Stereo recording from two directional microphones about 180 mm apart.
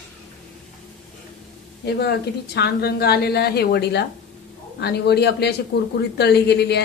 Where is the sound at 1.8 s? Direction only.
65° left (ahead or behind).